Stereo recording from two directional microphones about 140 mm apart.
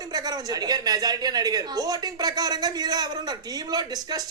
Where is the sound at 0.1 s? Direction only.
30° right (ahead or behind).